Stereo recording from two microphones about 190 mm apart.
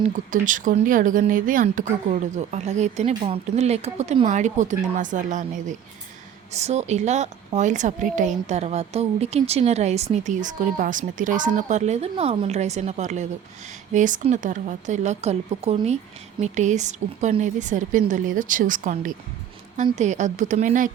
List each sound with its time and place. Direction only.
0.3 s a woman's voice: 45° right (ahead or behind)